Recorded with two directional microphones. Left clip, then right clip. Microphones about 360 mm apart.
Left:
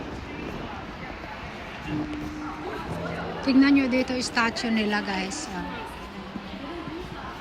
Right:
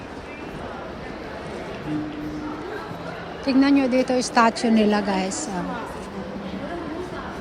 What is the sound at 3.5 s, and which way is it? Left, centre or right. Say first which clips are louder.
Speech: right 2 dB; right.